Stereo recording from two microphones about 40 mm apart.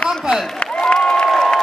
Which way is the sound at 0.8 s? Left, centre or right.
Left.